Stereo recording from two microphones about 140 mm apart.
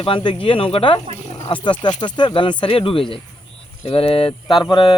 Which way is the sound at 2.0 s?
30° left (ahead or behind).